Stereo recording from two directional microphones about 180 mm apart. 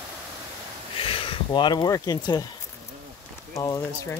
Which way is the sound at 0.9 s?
30° left (ahead or behind).